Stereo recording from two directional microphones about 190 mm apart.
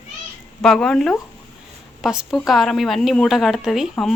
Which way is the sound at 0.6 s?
5° left (ahead or behind).